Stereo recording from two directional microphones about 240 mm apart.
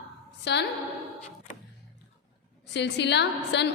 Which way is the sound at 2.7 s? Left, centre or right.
Left.